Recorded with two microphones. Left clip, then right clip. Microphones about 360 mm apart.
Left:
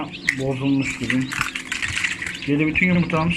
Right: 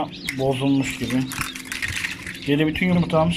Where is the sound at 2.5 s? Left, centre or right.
Right.